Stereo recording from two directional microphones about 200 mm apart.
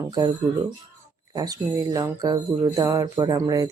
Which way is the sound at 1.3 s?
20° right (ahead or behind).